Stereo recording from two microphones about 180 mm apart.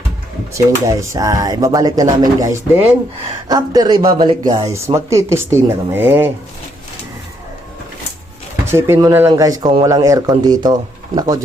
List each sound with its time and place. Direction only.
0.5 s speech: 15° right (ahead or behind)
8.6 s speech: 15° right (ahead or behind)